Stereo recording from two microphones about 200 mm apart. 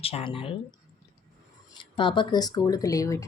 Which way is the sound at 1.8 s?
25° left (ahead or behind).